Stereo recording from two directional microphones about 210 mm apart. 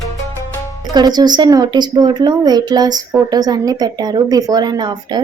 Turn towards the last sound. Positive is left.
turn(degrees=-20)  # may be behind; listen again after turning